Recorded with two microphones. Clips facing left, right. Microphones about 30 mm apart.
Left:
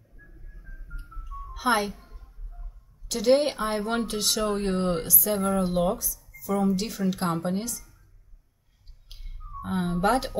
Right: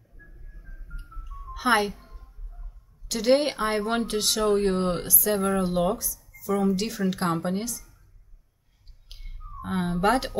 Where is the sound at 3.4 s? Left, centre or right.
Centre.